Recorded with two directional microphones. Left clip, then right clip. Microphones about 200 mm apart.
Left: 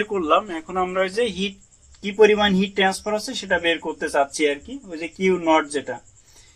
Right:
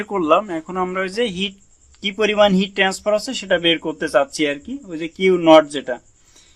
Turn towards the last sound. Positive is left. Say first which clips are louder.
# right 8 dB
turn(degrees=-50)  # may be behind; listen again after turning